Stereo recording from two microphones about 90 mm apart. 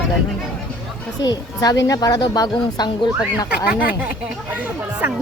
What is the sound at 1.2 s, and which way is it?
A woman's voice, 45° left (ahead or behind).